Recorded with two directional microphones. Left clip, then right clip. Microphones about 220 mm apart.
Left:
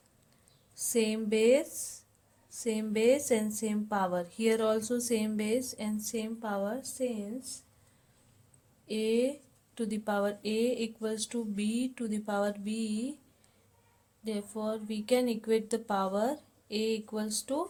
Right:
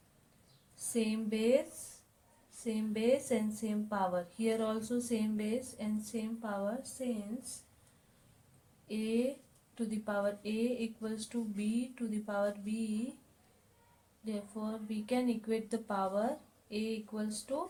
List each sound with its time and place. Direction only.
0.9 s speech: 50° left (ahead or behind)
2.6 s a woman's voice: 50° left (ahead or behind)
8.9 s speech: 50° left (ahead or behind)
14.3 s speech: 50° left (ahead or behind)